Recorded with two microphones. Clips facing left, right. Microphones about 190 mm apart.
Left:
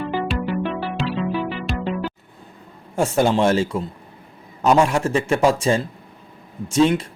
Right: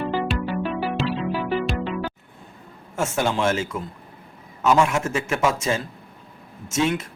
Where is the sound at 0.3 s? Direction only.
Centre (ahead or behind).